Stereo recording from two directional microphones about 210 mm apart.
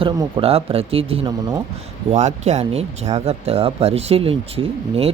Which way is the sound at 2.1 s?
30° right (ahead or behind).